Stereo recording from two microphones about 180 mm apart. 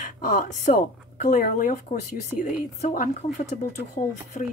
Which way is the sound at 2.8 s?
45° left (ahead or behind).